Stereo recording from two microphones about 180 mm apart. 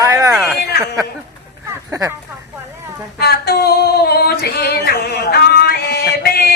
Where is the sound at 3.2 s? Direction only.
60° left (ahead or behind).